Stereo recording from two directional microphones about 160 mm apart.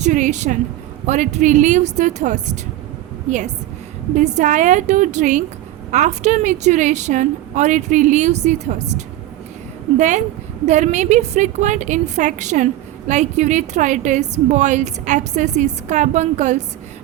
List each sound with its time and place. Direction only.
0.0 s a woman's voice: 50° right (ahead or behind)